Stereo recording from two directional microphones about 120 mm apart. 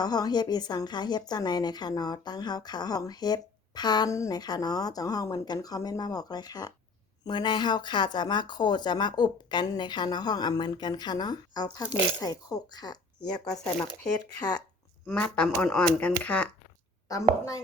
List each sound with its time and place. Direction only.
0.0 s speech: 35° left (ahead or behind)
15.0 s speech: 10° left (ahead or behind)